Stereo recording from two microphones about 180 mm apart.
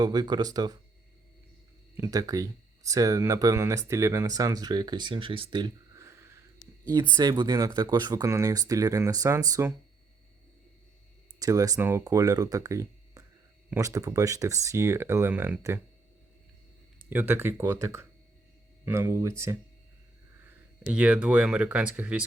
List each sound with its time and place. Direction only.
0.0 s speech: 20° right (ahead or behind)
2.0 s speech: 20° right (ahead or behind)
11.3 s speech: 20° right (ahead or behind)
17.1 s speech: 10° right (ahead or behind)
20.4 s speech: 10° right (ahead or behind)